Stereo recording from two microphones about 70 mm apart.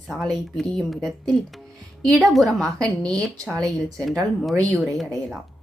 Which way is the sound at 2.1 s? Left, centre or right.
Centre.